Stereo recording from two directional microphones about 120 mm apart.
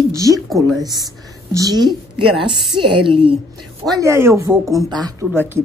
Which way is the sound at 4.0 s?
25° right (ahead or behind).